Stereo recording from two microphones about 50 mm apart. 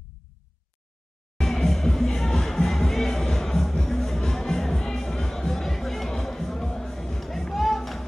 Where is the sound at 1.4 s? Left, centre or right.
Centre.